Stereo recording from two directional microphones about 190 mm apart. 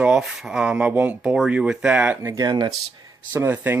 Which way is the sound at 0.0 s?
5° right (ahead or behind).